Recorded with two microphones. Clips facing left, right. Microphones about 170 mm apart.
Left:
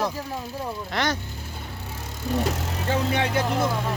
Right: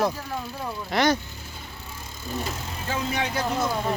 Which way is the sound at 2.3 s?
75° left (ahead or behind).